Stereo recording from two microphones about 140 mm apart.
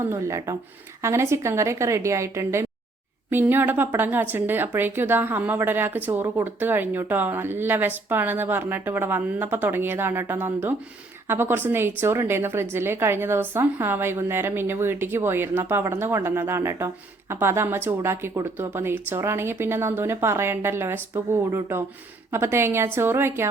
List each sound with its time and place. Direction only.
0.0 s a woman's voice: 20° right (ahead or behind)